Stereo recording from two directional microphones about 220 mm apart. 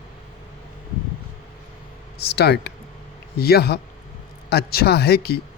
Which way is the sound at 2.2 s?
45° left (ahead or behind).